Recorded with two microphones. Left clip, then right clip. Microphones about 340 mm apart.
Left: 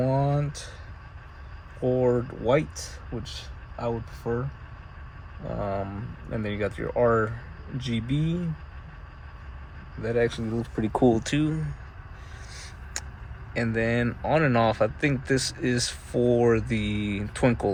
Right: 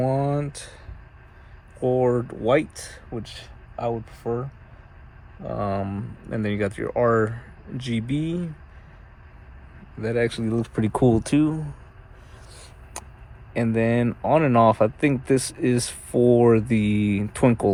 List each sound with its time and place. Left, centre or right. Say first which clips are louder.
0.0 s a sound: right 2 dB; right
2.0 s speech: right 2 dB; right
3.8 s speech: right 3 dB; right
5.5 s speech: right 3 dB; right
10.0 s speech: right 2 dB; right
10.9 s speech: right 1 dB; right
11.2 s speech: right 6 dB; centre
12.5 s vehicle: left 2 dB; centre
13.5 s speech: right 4 dB; centre
16.1 s speech: right 5 dB; right
16.4 s speech: right 5 dB; centre